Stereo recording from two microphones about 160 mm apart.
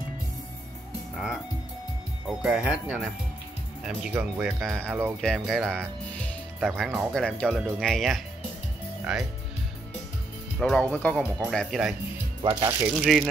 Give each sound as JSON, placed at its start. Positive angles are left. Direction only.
{"t": 1.1, "sound": "music", "side_deg": -5}
{"t": 2.2, "sound": "speech", "side_deg": -5}
{"t": 10.6, "sound": "speech", "side_deg": 5}
{"t": 11.5, "sound": "speech", "side_deg": 0}
{"t": 12.4, "sound": "speech", "side_deg": -25}
{"t": 12.8, "sound": "speech", "side_deg": -5}